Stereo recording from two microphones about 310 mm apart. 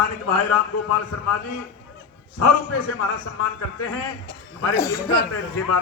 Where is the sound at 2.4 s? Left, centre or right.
Left.